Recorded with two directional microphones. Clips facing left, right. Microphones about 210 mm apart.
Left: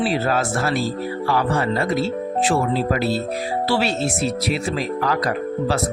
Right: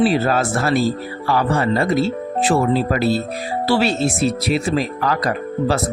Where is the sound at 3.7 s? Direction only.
30° right (ahead or behind).